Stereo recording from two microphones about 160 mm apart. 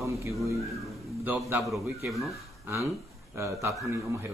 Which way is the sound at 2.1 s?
Centre (ahead or behind).